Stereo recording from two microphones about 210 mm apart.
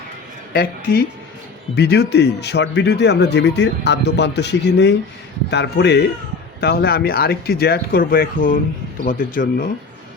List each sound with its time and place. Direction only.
0.5 s speech: 45° left (ahead or behind)